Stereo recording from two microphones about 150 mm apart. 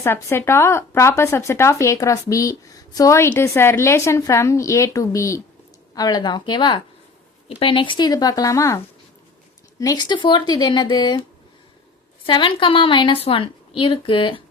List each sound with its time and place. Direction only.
0.0 s speech: 15° left (ahead or behind)
9.8 s speech: 25° left (ahead or behind)
12.2 s a woman's voice: 35° left (ahead or behind)